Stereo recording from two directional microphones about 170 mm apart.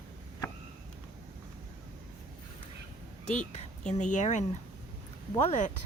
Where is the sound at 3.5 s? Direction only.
45° left (ahead or behind).